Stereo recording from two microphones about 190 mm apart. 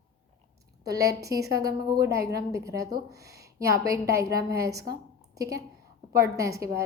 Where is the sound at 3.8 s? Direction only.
15° right (ahead or behind).